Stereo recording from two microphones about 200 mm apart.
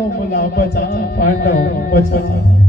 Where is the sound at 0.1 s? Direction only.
40° left (ahead or behind).